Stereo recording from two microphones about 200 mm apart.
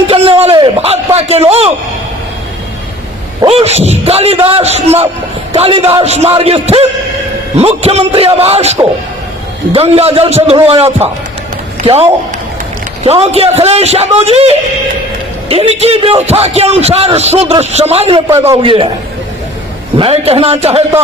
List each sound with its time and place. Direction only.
0.1 s a sound: 30° right (ahead or behind)
3.4 s a man's voice: 30° right (ahead or behind)
13.1 s a man's voice: 30° right (ahead or behind)
20.0 s a man's voice: 30° right (ahead or behind)